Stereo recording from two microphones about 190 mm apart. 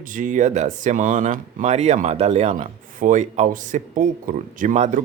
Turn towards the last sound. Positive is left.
turn(degrees=-40)  # may be behind; listen again after turning